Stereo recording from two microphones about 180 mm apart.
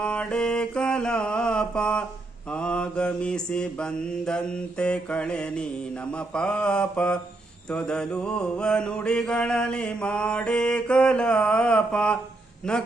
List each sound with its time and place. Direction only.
0.0 s mantra: 5° left (ahead or behind)